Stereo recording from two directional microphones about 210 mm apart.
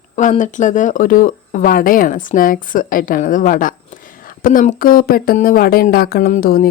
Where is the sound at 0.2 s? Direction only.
35° left (ahead or behind).